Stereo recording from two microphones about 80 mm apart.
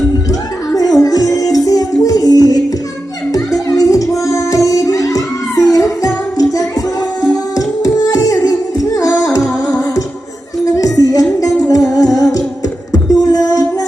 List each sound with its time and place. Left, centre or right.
0.3 s music: left
10.8 s music: left